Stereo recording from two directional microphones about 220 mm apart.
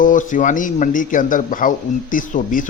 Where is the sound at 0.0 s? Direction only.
35° left (ahead or behind).